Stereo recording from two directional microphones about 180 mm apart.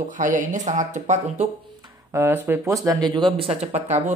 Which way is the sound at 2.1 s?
15° right (ahead or behind).